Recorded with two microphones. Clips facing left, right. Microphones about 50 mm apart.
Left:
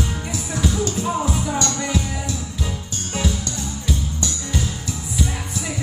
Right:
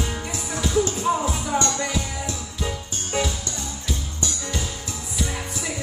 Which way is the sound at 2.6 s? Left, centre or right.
Centre.